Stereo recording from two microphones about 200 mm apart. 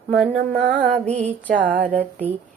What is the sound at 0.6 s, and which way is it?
Music, 40° right (ahead or behind).